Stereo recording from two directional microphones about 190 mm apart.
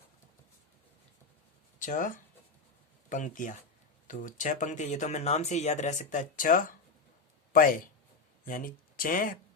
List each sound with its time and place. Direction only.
1.8 s speech: 40° left (ahead or behind)